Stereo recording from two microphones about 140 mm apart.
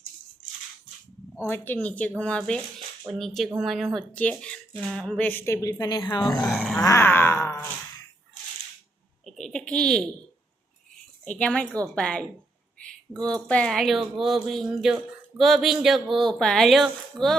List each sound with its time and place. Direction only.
1.4 s speech: 15° left (ahead or behind)
6.4 s speech: centre (ahead or behind)
6.7 s groan: 20° left (ahead or behind)
9.2 s a sound: centre (ahead or behind)
11.3 s speech: 10° left (ahead or behind)